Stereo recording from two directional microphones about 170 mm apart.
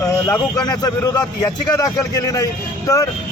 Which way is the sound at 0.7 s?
20° left (ahead or behind).